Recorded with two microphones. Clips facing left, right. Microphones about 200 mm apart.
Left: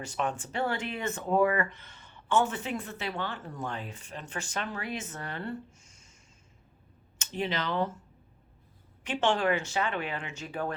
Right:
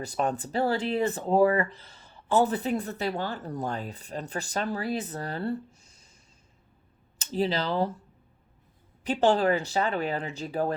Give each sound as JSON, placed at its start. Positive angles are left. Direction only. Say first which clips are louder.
{"t": 0.0, "sound": "speech", "louder": "right 4 dB", "side_deg": -35}
{"t": 7.2, "sound": "speech", "louder": "right 5 dB", "side_deg": -35}
{"t": 9.0, "sound": "speech", "louder": "right 4 dB", "side_deg": -35}